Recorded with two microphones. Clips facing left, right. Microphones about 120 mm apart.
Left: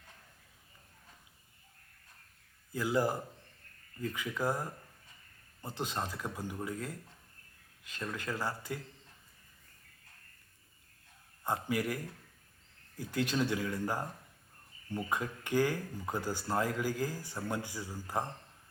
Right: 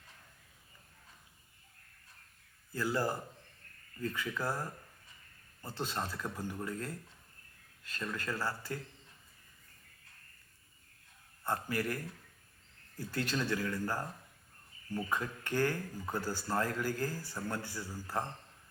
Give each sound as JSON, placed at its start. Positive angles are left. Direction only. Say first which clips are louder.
{"t": 2.7, "sound": "speech", "louder": "left 2 dB", "side_deg": 15}
{"t": 11.4, "sound": "speech", "louder": "left 2 dB", "side_deg": 15}
{"t": 13.0, "sound": "speech", "louder": "left 3 dB", "side_deg": 15}